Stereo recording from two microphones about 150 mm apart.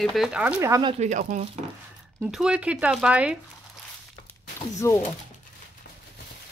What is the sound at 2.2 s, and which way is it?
Speech, 5° right (ahead or behind).